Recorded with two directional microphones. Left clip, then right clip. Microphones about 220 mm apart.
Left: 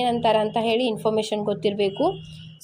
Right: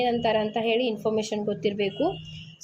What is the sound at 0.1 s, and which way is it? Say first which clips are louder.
A woman's voice: left 4 dB; 20° left (ahead or behind).